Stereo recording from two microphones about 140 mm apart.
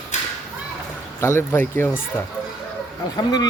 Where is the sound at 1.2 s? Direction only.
20° left (ahead or behind).